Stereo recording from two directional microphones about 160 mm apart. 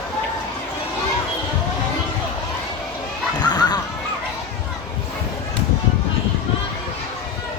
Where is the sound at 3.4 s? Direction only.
25° left (ahead or behind).